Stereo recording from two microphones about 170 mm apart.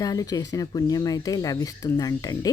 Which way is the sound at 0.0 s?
20° left (ahead or behind).